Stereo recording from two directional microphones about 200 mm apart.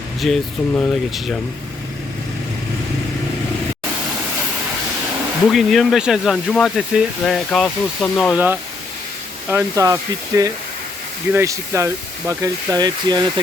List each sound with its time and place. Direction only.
0.2 s speech: centre (ahead or behind)
5.5 s speech: centre (ahead or behind)
9.5 s speech: 10° right (ahead or behind)